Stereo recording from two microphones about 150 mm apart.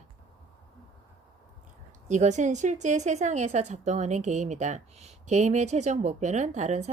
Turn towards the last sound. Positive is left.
turn(degrees=-50)  # may be behind; listen again after turning